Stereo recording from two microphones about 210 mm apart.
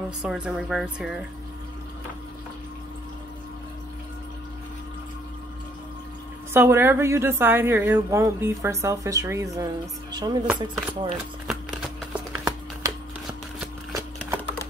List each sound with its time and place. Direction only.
0.2 s speech: 5° right (ahead or behind)
6.5 s a woman's voice: 10° right (ahead or behind)
10.4 s speech: 5° right (ahead or behind)
11.4 s a sound: centre (ahead or behind)